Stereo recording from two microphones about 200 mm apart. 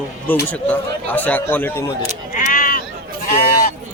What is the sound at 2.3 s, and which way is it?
Bleat, 45° left (ahead or behind).